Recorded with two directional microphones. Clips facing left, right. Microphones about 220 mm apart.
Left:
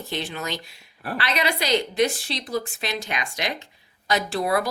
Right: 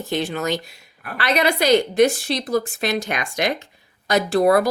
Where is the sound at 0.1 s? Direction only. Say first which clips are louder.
Right 8 dB; 45° right (ahead or behind).